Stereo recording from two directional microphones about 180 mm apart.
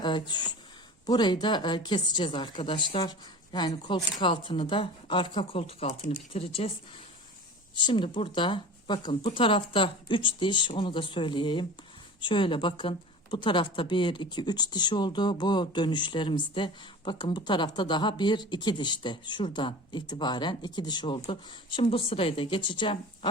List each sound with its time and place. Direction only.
0.0 s speech: 25° left (ahead or behind)
7.8 s speech: 25° left (ahead or behind)